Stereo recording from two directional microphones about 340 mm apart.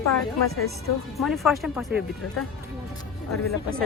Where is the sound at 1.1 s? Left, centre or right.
Centre.